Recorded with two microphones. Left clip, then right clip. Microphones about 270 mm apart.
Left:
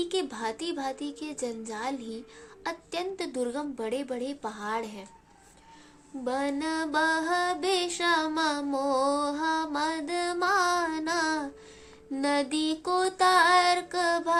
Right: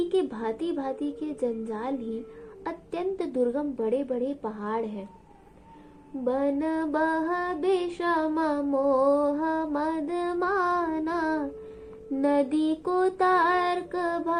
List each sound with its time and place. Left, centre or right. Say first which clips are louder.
0.0 s a child's voice: right 3 dB; left
2.6 s music: right 2 dB; left
6.2 s music: right 3 dB; left